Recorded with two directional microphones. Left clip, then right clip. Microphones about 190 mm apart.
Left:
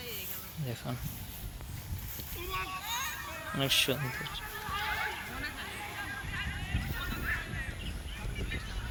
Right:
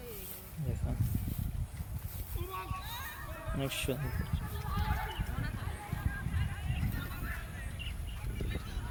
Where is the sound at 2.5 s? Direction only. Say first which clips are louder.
Left 6 dB; 35° left (ahead or behind).